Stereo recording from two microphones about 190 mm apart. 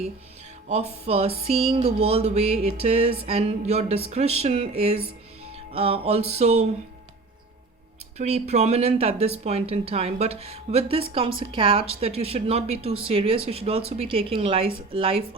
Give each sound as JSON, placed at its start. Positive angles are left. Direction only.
{"t": 0.7, "sound": "a woman's voice", "side_deg": -35}
{"t": 8.2, "sound": "a woman's voice", "side_deg": -35}